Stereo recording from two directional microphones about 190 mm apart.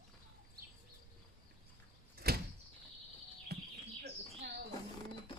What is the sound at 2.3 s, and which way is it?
Sliding door, 55° right (ahead or behind).